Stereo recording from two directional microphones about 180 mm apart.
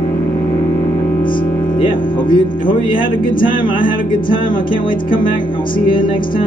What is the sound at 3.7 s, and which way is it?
Music, 50° left (ahead or behind).